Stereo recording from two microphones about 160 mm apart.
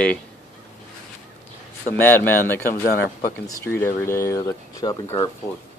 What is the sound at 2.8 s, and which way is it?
Speech, 65° left (ahead or behind).